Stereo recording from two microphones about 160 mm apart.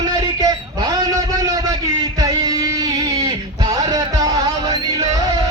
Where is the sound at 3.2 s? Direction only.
25° right (ahead or behind).